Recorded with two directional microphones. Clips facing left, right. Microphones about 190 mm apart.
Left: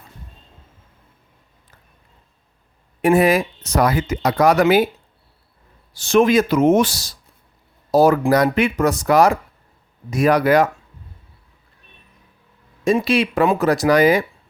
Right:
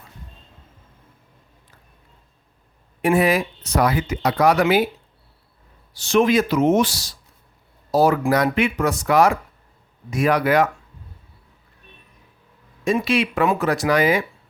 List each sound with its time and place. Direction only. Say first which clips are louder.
3.0 s speech: left 3 dB; 45° left (ahead or behind)
5.9 s speech: left 3 dB; 50° left (ahead or behind)
12.8 s speech: left 3 dB; 35° left (ahead or behind)